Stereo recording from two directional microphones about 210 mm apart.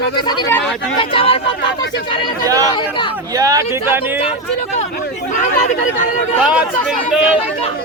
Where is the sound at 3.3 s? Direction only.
15° right (ahead or behind).